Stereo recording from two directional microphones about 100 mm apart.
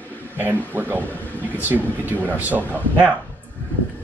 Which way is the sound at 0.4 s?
20° right (ahead or behind).